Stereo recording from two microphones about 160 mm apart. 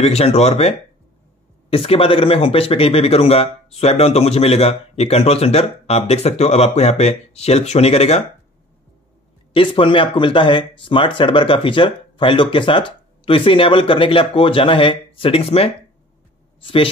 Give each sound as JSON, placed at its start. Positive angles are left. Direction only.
{"t": 0.0, "sound": "speech", "side_deg": 40}
{"t": 9.5, "sound": "speech", "side_deg": 35}